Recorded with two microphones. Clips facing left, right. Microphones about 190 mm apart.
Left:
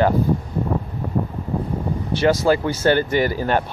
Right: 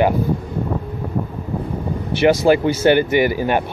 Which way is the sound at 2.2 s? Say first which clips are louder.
Right 4 dB; 20° right (ahead or behind).